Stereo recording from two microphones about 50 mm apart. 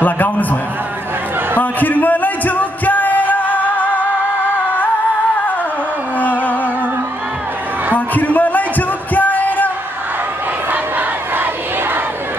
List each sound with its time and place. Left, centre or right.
0.0 s a man's voice: left
1.6 s music: left
8.1 s music: left
10.7 s battle cry: right